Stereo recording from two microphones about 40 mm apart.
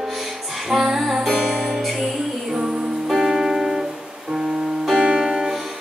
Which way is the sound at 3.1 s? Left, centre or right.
Centre.